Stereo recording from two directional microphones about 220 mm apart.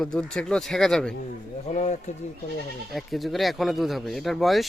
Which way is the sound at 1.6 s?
30° left (ahead or behind).